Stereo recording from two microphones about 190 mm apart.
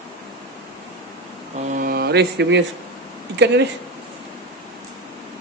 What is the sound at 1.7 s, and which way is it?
Mantra, 50° right (ahead or behind).